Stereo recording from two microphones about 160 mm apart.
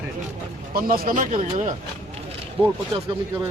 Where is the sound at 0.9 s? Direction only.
55° right (ahead or behind).